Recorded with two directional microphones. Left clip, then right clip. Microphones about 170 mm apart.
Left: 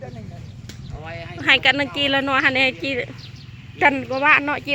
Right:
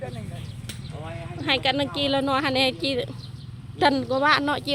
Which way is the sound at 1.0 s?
65° right (ahead or behind).